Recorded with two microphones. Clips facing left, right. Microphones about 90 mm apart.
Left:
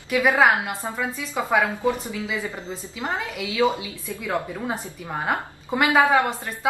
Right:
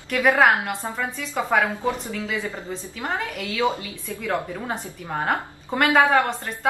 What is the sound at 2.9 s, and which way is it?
A woman's voice, 15° left (ahead or behind).